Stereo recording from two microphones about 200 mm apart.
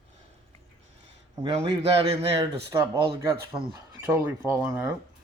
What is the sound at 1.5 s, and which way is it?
Speech, 30° right (ahead or behind).